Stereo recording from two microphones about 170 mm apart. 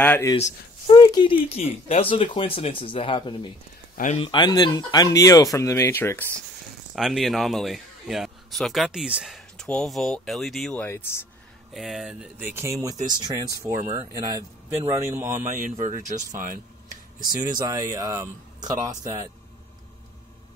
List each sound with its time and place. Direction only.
0.0 s speech: 10° left (ahead or behind)
0.8 s speech: 25° left (ahead or behind)
3.9 s speech: 50° left (ahead or behind)
4.2 s speech: 25° left (ahead or behind); by 6.4 s 10° left (ahead or behind)
7.0 s a man's voice: centre (ahead or behind)
10.8 s speech: 15° left (ahead or behind)
11.7 s speech: centre (ahead or behind); by 13.7 s 20° right (ahead or behind)
13.7 s speech: 45° right (ahead or behind)
14.9 s speech: 15° right (ahead or behind)
15.4 s speech: 45° right (ahead or behind)
16.3 s a sound: 50° right (ahead or behind)
17.4 s speech: 25° right (ahead or behind)